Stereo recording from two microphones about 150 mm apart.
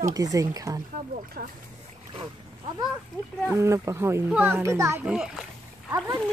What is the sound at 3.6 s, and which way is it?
A child's voice, 20° right (ahead or behind).